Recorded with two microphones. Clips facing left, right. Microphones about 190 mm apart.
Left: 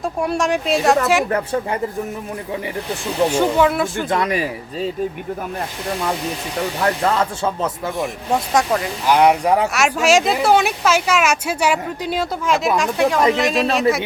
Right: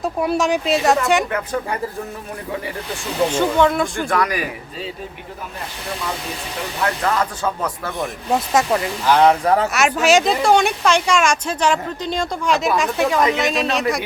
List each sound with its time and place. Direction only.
0.0 s speech: centre (ahead or behind)
3.3 s speech: 10° left (ahead or behind)
4.1 s speech: 25° left (ahead or behind)
6.8 s speech: 25° left (ahead or behind)
8.5 s speech: 5° right (ahead or behind)
9.0 s speech: 10° left (ahead or behind)
9.7 s speech: centre (ahead or behind)